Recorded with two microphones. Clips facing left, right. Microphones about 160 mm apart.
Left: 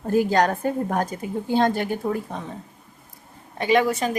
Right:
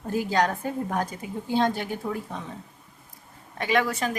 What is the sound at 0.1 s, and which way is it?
A woman's voice, 50° left (ahead or behind).